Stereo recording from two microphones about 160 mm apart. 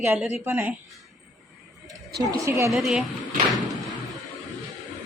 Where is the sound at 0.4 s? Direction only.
15° right (ahead or behind).